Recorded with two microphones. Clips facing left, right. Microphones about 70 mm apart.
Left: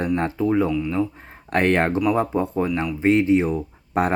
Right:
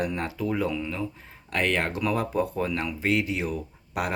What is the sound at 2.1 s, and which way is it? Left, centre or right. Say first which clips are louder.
Speech: left 5 dB; left.